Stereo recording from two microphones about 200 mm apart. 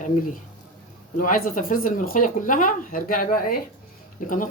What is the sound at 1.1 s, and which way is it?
Speech, 45° left (ahead or behind).